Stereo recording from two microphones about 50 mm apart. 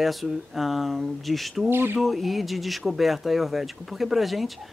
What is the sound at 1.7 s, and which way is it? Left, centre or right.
Speech, right.